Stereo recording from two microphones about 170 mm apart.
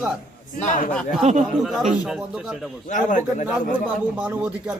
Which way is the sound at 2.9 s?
50° left (ahead or behind).